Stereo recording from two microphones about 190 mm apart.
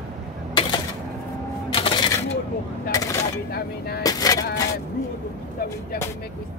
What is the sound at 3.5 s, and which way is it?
Speech, 55° left (ahead or behind).